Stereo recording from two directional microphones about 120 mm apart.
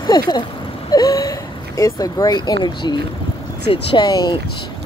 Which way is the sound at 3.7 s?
50° left (ahead or behind).